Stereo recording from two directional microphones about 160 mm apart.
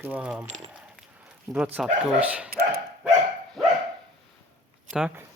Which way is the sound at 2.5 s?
65° right (ahead or behind).